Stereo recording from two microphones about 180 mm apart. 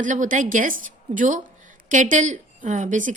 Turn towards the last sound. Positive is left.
turn(degrees=-45)  # may be behind; listen again after turning